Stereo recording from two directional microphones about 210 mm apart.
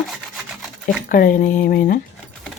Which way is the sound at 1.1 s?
40° left (ahead or behind).